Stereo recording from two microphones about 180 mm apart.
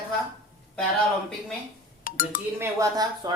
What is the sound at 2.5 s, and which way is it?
Speech, 20° right (ahead or behind).